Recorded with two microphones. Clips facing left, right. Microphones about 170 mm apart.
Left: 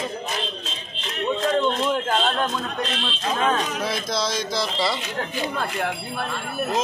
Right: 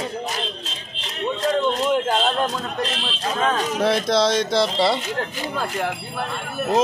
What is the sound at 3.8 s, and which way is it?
Speech, 70° right (ahead or behind).